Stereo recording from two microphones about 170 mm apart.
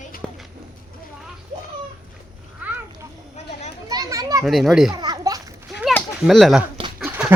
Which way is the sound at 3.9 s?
20° right (ahead or behind).